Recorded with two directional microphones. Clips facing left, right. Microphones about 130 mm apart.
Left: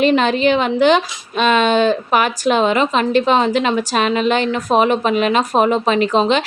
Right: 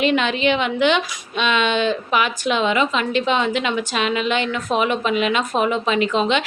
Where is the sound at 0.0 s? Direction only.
40° left (ahead or behind).